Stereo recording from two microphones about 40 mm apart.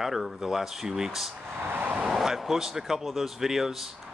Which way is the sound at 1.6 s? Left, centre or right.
Right.